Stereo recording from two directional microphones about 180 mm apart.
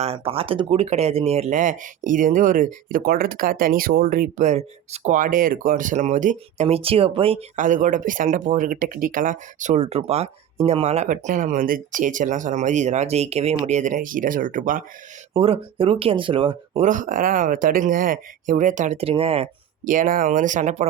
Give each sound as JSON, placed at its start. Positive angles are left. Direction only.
{"t": 0.0, "sound": "speech", "side_deg": -35}
{"t": 7.5, "sound": "speech", "side_deg": -45}
{"t": 15.3, "sound": "speech", "side_deg": -30}
{"t": 16.8, "sound": "speech", "side_deg": -45}
{"t": 19.8, "sound": "speech", "side_deg": -45}